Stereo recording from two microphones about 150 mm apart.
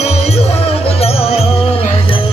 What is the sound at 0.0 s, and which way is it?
Music, 45° left (ahead or behind).